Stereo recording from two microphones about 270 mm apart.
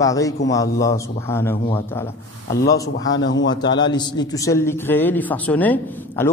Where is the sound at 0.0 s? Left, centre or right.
Centre.